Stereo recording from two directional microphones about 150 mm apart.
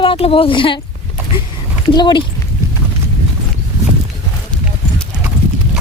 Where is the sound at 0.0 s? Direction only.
35° left (ahead or behind).